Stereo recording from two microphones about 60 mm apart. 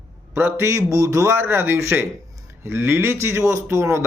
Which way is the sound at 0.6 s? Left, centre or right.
Right.